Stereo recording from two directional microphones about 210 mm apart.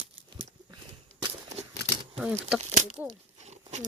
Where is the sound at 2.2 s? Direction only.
5° right (ahead or behind).